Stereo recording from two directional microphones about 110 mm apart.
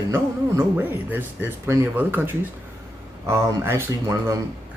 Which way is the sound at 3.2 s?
25° right (ahead or behind).